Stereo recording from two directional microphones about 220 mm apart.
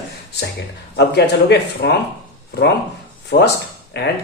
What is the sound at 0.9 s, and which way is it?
Speech, 50° left (ahead or behind).